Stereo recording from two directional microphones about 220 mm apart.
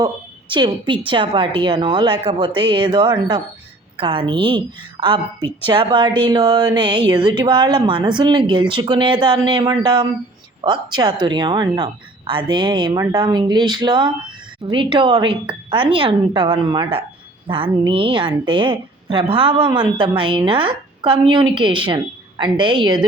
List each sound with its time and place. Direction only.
0.0 s a woman's voice: 20° right (ahead or behind)